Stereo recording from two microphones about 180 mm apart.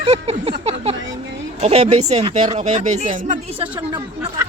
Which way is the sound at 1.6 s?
35° right (ahead or behind).